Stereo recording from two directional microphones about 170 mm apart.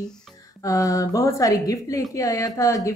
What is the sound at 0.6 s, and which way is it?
Speech, 20° left (ahead or behind).